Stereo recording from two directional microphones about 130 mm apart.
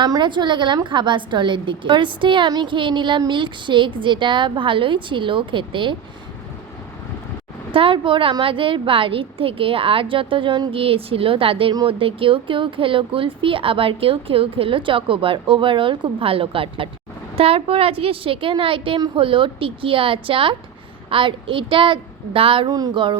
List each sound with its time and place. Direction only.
0.0 s a woman's voice: 35° right (ahead or behind)
7.7 s a woman's voice: 45° right (ahead or behind)